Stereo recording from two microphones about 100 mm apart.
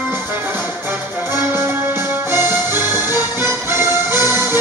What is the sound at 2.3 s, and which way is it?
Music, 25° right (ahead or behind).